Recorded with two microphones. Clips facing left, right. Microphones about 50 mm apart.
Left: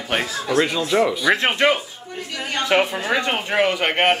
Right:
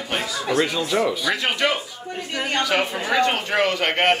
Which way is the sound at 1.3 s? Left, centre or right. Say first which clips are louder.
Left 4 dB; left.